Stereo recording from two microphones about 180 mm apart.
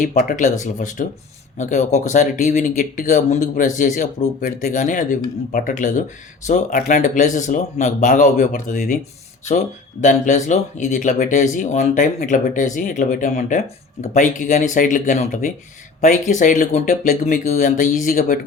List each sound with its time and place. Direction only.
0.0 s speech: 45° left (ahead or behind)